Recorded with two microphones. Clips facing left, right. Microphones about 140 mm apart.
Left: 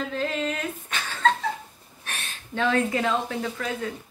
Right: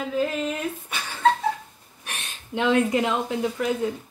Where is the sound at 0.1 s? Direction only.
10° right (ahead or behind).